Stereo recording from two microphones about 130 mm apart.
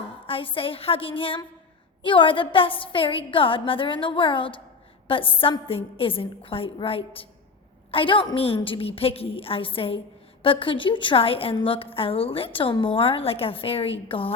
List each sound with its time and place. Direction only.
0.3 s a woman's voice: 45° left (ahead or behind)